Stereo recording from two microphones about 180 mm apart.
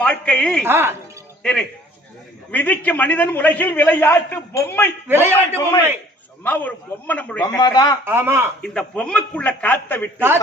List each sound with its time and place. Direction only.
0.0 s a man's voice: 5° left (ahead or behind)
0.6 s a man's voice: 10° right (ahead or behind)
1.4 s a man's voice: 5° left (ahead or behind)
5.0 s a man's voice: 10° right (ahead or behind)
6.4 s a man's voice: 10° left (ahead or behind)
7.4 s a man's voice: 20° left (ahead or behind)
8.0 s a man's voice: 15° right (ahead or behind)
8.6 s a man's voice: 5° left (ahead or behind)
10.2 s a man's voice: 10° right (ahead or behind)